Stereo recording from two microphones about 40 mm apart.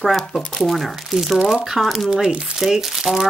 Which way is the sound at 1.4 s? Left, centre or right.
Centre.